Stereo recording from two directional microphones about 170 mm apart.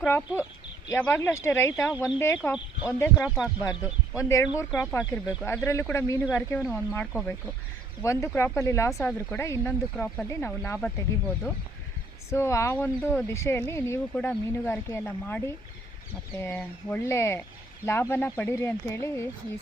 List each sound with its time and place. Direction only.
0.0 s speech: 10° left (ahead or behind)
1.9 s speech: 5° right (ahead or behind)
2.1 s speech: 15° left (ahead or behind)
3.2 s speech: 5° right (ahead or behind)
4.1 s speech: 20° left (ahead or behind)
9.0 s speech: 5° left (ahead or behind)
9.4 s speech: 15° left (ahead or behind)
12.3 s speech: 15° left (ahead or behind)